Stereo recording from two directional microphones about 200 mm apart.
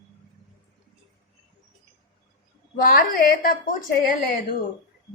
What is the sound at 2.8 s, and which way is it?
A woman's voice, 45° left (ahead or behind).